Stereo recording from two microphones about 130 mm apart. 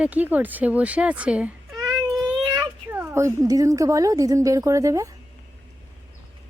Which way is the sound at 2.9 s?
20° right (ahead or behind).